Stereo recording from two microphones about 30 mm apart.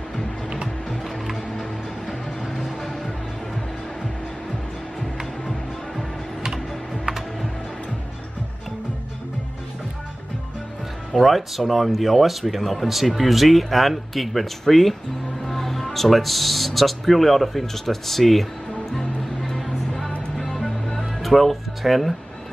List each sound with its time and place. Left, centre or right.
1.0 s music: centre
2.8 s music: centre
11.1 s speech: centre
19.6 s music: centre